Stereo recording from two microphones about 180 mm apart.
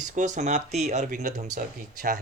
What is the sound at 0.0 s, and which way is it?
Speech, 45° right (ahead or behind).